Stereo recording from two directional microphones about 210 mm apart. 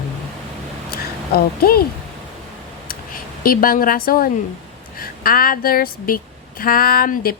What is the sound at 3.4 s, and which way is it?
Speech, 45° left (ahead or behind).